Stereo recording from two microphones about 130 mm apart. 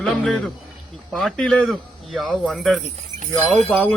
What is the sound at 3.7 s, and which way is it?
Speech, 10° left (ahead or behind).